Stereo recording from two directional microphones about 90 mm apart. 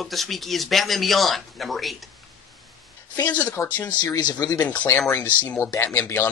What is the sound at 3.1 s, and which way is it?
Speech, 20° left (ahead or behind).